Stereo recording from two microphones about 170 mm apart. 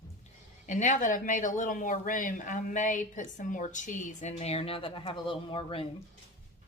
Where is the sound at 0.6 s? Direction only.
50° left (ahead or behind); by 5.8 s 30° left (ahead or behind).